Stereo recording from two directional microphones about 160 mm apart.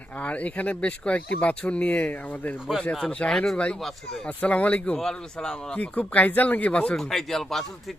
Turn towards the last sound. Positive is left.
turn(degrees=0)  # may be behind; listen again after turning